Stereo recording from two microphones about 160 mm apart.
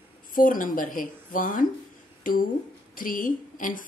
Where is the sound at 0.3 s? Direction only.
60° left (ahead or behind).